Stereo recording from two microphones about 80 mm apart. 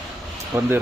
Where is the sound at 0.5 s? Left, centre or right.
Right.